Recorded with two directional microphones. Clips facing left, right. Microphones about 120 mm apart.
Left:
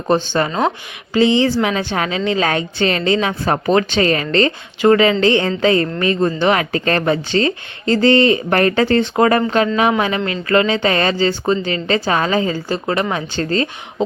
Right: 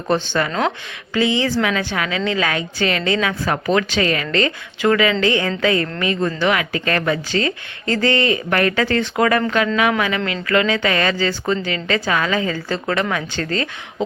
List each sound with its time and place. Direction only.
0.4 s a woman's voice: 30° left (ahead or behind)
12.6 s speech: 15° left (ahead or behind)